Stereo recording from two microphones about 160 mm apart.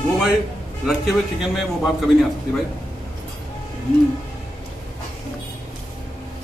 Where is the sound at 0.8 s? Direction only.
Centre (ahead or behind).